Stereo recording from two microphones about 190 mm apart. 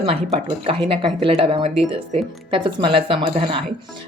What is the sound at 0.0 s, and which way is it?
Speech, 30° right (ahead or behind).